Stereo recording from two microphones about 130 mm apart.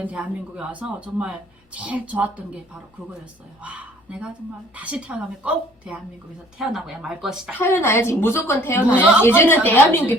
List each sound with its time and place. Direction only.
0.0 s speech: 10° right (ahead or behind)
3.6 s speech: 10° right (ahead or behind)
7.6 s a woman's voice: 20° left (ahead or behind)
8.9 s speech: 10° right (ahead or behind)
9.2 s a woman's voice: 20° left (ahead or behind)